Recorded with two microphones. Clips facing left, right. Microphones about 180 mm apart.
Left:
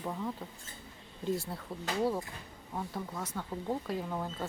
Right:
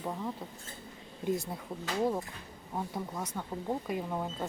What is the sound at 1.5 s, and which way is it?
Speech, 10° right (ahead or behind).